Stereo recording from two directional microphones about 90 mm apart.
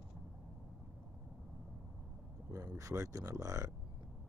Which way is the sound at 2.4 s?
35° right (ahead or behind).